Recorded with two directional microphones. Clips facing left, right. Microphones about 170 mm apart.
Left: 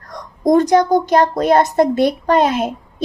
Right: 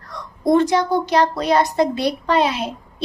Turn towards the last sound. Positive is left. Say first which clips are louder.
# left 6 dB
turn(degrees=50)  # may be behind; listen again after turning